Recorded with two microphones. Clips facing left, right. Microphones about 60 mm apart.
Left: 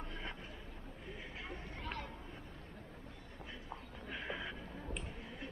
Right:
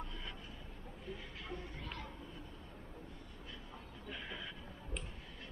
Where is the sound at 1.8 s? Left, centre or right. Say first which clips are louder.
Left 3 dB; left.